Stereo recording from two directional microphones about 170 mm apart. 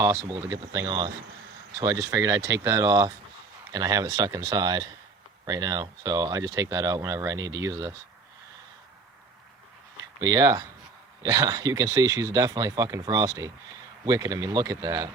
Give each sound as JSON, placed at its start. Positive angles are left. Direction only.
{"t": 0.0, "sound": "speech", "side_deg": -15}
{"t": 10.2, "sound": "speech", "side_deg": -20}